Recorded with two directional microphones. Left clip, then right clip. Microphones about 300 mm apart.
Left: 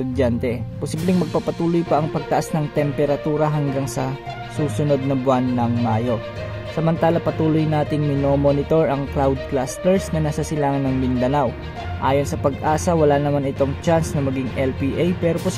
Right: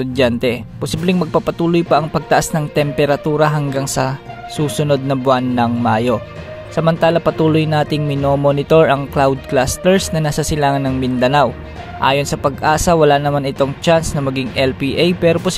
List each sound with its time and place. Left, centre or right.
0.1 s speech: centre